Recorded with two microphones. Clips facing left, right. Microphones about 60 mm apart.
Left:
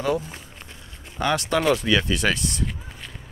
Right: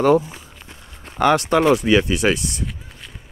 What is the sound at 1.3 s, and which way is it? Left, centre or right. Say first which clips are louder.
Speech: right 4 dB; right.